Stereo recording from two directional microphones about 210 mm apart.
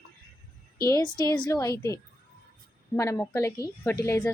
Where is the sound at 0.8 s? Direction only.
15° left (ahead or behind).